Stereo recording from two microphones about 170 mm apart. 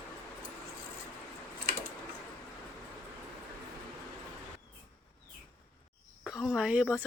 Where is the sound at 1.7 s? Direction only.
65° right (ahead or behind).